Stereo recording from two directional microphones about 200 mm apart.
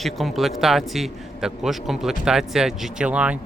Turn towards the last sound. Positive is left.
turn(degrees=-5)  # may be behind; listen again after turning